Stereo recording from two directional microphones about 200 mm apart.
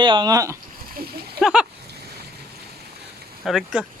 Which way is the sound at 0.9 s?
50° right (ahead or behind).